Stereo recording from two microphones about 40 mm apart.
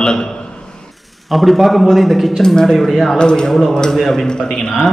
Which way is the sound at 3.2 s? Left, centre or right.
Left.